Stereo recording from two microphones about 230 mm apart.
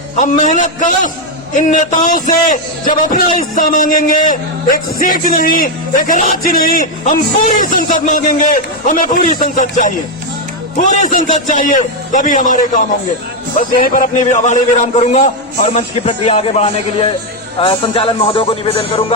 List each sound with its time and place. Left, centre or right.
0.2 s a man's voice: left